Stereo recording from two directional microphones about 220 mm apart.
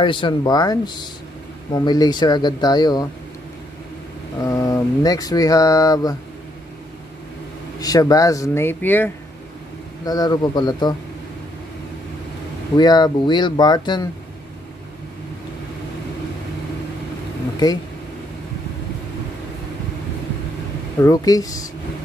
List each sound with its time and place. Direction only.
0.0 s speech: 20° left (ahead or behind)
4.5 s speech: 15° left (ahead or behind)
7.8 s speech: 15° left (ahead or behind)
12.7 s speech: 20° left (ahead or behind)
21.0 s speech: 15° left (ahead or behind)